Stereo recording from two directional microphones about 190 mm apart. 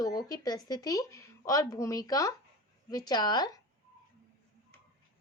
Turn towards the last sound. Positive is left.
turn(degrees=20)  # may be behind; listen again after turning